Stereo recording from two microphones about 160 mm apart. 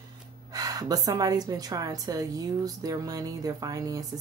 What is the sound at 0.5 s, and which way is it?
A woman's voice, 25° right (ahead or behind).